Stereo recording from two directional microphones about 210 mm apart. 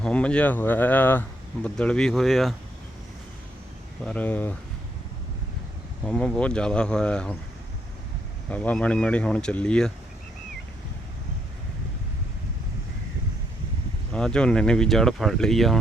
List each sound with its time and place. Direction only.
0.0 s speech: 5° left (ahead or behind)
4.0 s speech: 5° left (ahead or behind)
6.1 s speech: 5° left (ahead or behind)
8.4 s speech: 5° left (ahead or behind)
14.1 s speech: 5° left (ahead or behind)